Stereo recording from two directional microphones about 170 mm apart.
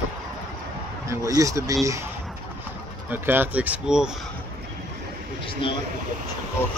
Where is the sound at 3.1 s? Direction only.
10° right (ahead or behind).